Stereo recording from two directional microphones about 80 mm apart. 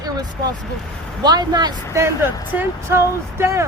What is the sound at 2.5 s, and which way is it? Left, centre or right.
Speech, right.